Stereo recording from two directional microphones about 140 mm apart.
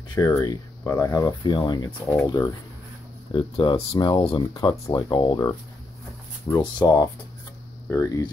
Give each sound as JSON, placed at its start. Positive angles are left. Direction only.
{"t": 0.1, "sound": "speech", "side_deg": 25}
{"t": 3.3, "sound": "speech", "side_deg": 40}
{"t": 4.4, "sound": "speech", "side_deg": 25}
{"t": 6.6, "sound": "speech", "side_deg": 30}